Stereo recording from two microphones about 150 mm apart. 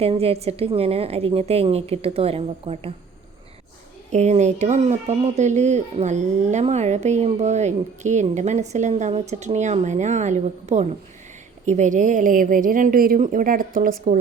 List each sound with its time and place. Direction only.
0.0 s a woman's voice: 40° right (ahead or behind)
4.1 s speech: 50° right (ahead or behind); by 13.1 s 75° right (ahead or behind)
13.1 s speech: 60° right (ahead or behind)